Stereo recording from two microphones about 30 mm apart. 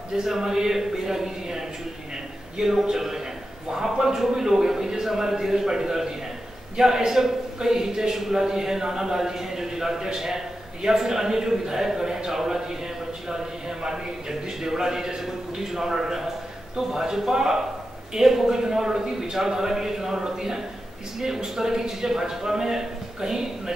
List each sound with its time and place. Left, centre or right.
0.2 s a man's voice: centre
2.6 s a man's voice: centre
14.6 s a man's voice: centre